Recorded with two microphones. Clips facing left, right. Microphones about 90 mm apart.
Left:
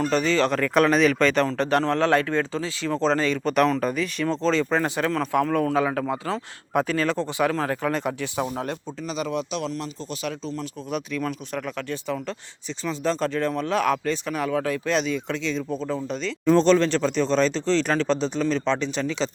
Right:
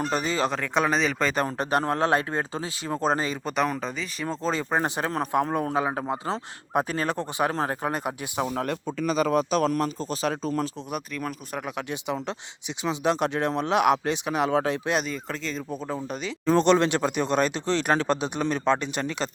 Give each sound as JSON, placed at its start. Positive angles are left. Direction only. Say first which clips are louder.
{"t": 0.1, "sound": "speech", "louder": "left 4 dB", "side_deg": -15}
{"t": 1.5, "sound": "speech", "louder": "left 3 dB", "side_deg": -15}
{"t": 3.5, "sound": "speech", "louder": "left 6 dB", "side_deg": 0}
{"t": 4.2, "sound": "speech", "louder": "left 5 dB", "side_deg": -10}
{"t": 4.8, "sound": "speech", "louder": "left 2 dB", "side_deg": -25}
{"t": 8.4, "sound": "speech", "louder": "even", "side_deg": -55}
{"t": 9.1, "sound": "a man's voice", "louder": "right 4 dB", "side_deg": -40}
{"t": 10.9, "sound": "speech", "louder": "left 8 dB", "side_deg": -5}
{"t": 14.8, "sound": "speech", "louder": "left 3 dB", "side_deg": -5}